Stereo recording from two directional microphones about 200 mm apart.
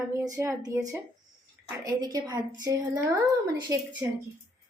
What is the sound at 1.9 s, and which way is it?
Speech, 20° right (ahead or behind).